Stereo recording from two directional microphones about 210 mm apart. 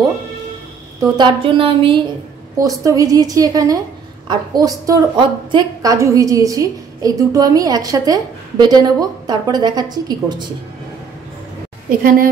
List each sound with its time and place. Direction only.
1.0 s a woman's voice: 20° right (ahead or behind)